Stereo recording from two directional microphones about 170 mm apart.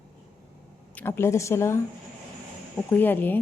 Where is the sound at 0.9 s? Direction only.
15° left (ahead or behind).